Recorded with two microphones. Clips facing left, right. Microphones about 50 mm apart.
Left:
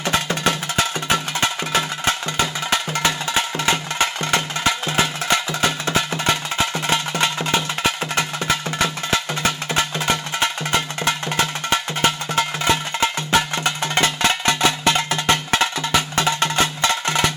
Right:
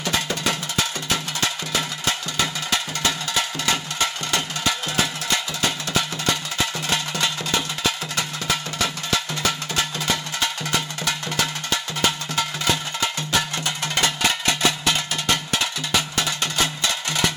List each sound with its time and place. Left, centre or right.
0.0 s percussion: left
1.1 s music: left